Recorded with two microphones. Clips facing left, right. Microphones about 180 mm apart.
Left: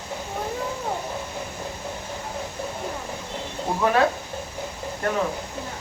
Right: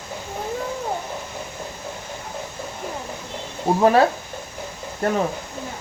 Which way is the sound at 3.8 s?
35° right (ahead or behind).